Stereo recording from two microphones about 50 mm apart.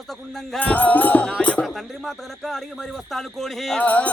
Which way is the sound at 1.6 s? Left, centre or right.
Centre.